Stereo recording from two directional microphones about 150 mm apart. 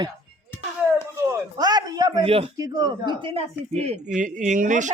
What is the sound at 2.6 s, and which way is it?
Speech, 25° right (ahead or behind).